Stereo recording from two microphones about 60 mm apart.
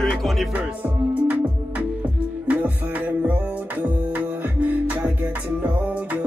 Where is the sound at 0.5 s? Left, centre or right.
Right.